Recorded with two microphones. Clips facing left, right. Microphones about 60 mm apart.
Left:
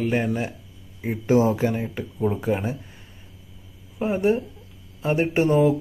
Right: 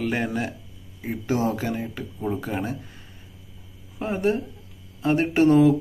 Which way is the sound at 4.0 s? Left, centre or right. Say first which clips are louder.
Left 3 dB; centre.